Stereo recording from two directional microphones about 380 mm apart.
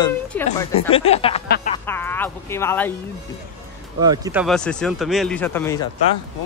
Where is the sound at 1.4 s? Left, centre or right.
Left.